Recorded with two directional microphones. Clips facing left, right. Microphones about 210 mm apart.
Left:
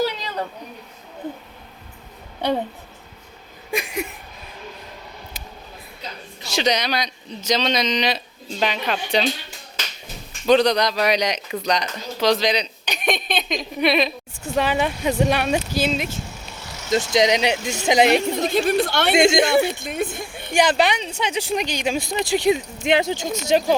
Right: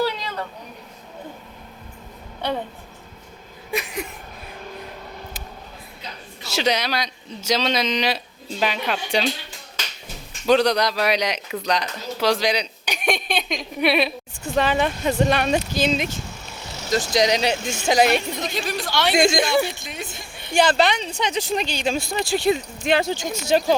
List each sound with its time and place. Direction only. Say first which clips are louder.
3.7 s a sound: left 2 dB; 15° left (ahead or behind)
6.4 s a man's voice: left 1 dB; 5° right (ahead or behind)
10.4 s speech: left 1 dB; 5° right (ahead or behind)
14.4 s speech: even; 10° left (ahead or behind)
16.9 s speech: left 2 dB; 20° left (ahead or behind)
18.5 s a woman's voice: left 7 dB; 55° left (ahead or behind)
19.1 s speech: left 3 dB; 25° left (ahead or behind)
19.7 s a woman's voice: left 8 dB; 55° left (ahead or behind)
20.5 s speech: even; 15° left (ahead or behind)